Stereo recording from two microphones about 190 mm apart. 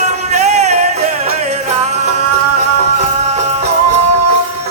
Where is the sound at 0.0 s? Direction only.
35° right (ahead or behind).